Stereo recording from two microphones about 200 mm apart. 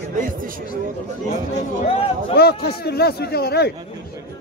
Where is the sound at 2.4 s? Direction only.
55° left (ahead or behind).